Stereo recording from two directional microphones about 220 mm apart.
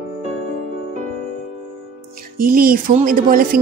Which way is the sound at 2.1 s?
40° right (ahead or behind).